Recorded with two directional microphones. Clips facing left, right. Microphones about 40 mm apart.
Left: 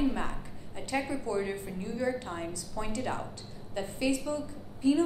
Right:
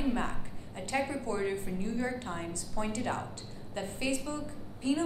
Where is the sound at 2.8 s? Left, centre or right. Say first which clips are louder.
Right 2 dB; centre.